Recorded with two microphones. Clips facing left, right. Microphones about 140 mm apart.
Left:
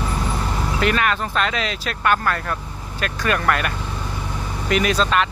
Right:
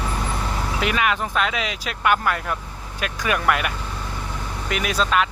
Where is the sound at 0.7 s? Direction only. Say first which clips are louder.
Left 2 dB; 10° right (ahead or behind).